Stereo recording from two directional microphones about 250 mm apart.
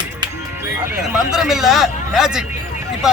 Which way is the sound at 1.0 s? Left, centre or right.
Centre.